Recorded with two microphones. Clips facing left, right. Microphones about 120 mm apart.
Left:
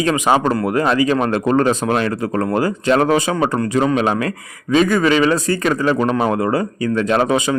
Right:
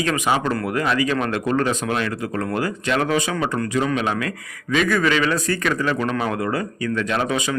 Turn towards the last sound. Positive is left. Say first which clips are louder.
# left 6 dB
turn(degrees=30)  # may be behind; listen again after turning